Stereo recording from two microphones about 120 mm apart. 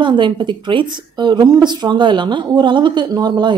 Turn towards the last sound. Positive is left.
turn(degrees=-35)  # may be behind; listen again after turning